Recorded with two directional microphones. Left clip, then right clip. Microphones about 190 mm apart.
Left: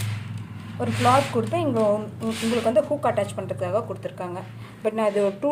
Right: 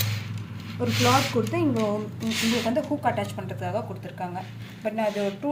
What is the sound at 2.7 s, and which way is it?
A woman's voice, 45° left (ahead or behind).